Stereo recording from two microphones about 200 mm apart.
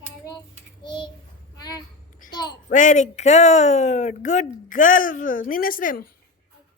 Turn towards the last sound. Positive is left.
turn(degrees=45)  # may be behind; listen again after turning